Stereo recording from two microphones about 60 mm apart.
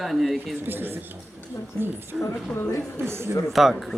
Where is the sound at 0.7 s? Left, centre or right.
Right.